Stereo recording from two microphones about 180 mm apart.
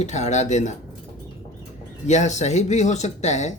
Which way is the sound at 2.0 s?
40° left (ahead or behind).